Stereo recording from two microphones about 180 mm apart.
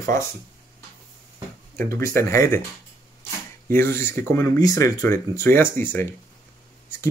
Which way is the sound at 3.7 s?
15° left (ahead or behind).